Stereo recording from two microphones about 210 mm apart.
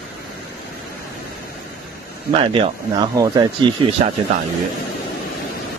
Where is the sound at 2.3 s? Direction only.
25° right (ahead or behind).